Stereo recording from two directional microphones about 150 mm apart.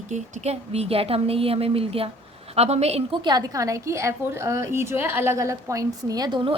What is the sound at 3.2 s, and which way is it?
A woman's voice, 25° right (ahead or behind).